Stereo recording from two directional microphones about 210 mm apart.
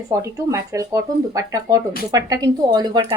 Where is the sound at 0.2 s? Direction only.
15° right (ahead or behind).